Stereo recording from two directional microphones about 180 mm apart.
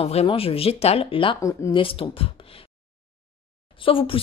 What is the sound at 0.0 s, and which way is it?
Speech, 35° left (ahead or behind).